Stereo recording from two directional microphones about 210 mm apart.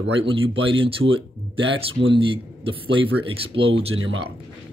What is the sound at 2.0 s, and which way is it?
Speech, 25° right (ahead or behind).